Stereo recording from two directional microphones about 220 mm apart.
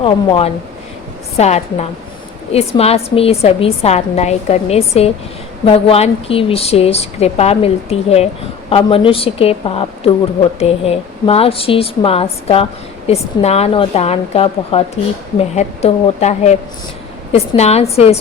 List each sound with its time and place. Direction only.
0.0 s a woman's voice: 25° left (ahead or behind)